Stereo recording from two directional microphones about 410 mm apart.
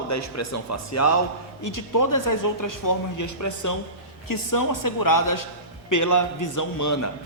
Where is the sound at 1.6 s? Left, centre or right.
Left.